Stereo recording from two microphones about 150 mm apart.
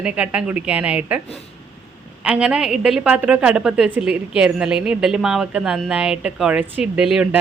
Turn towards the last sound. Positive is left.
turn(degrees=-5)  # may be behind; listen again after turning